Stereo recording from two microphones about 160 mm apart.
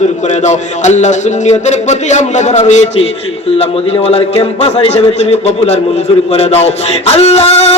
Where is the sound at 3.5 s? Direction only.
40° left (ahead or behind).